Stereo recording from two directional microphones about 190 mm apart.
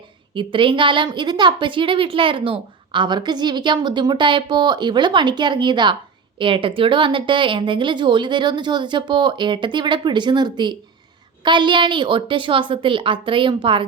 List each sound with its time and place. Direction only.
0.3 s a woman's voice: 25° right (ahead or behind)